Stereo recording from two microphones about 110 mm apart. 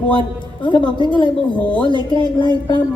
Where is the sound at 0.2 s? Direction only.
50° left (ahead or behind).